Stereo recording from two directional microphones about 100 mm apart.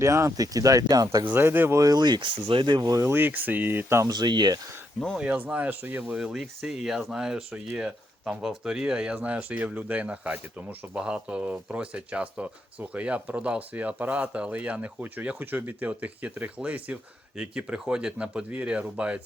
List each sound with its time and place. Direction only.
0.0 s speech: 30° right (ahead or behind)
1.3 s speech: 20° right (ahead or behind)
1.8 s speech: 45° right (ahead or behind)
3.1 s speech: 20° right (ahead or behind)
4.1 s speech: 45° right (ahead or behind)
5.1 s speech: 15° right (ahead or behind)